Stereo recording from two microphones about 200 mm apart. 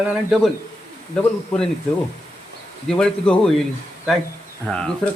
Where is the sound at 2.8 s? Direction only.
5° left (ahead or behind).